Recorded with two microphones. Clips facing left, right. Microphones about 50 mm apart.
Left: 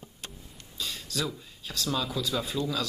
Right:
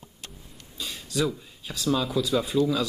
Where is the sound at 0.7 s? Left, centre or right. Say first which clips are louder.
Right 4 dB; centre.